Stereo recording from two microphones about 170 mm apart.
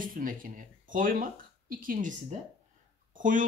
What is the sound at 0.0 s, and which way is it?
Speech, 55° right (ahead or behind).